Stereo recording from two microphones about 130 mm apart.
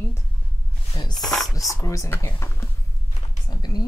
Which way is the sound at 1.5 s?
25° left (ahead or behind).